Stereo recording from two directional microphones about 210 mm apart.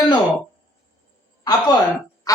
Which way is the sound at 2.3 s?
15° left (ahead or behind).